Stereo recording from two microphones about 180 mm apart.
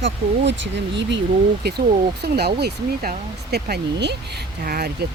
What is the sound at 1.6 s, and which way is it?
Speech, 65° right (ahead or behind).